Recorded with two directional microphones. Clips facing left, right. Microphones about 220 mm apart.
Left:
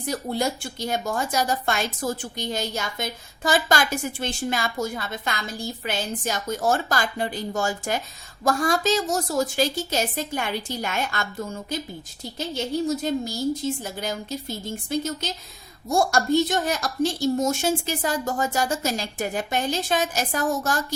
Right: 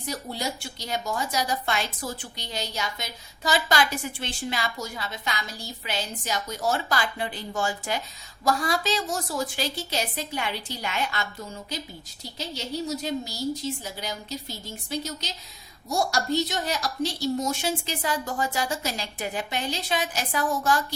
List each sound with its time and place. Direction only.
0.0 s a woman's voice: 50° left (ahead or behind)